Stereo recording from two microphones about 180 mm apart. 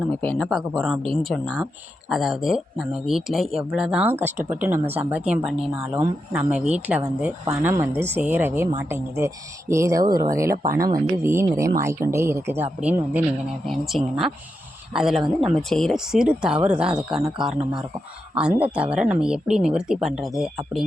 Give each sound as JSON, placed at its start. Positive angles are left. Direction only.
{"t": 0.1, "sound": "a woman's voice", "side_deg": 5}
{"t": 6.0, "sound": "a woman's voice", "side_deg": -15}
{"t": 6.5, "sound": "a woman's voice", "side_deg": -5}